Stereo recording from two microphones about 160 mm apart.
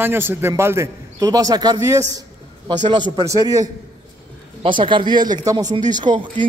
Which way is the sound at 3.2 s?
20° right (ahead or behind).